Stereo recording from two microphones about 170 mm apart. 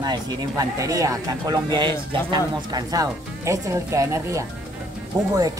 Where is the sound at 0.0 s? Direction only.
20° right (ahead or behind).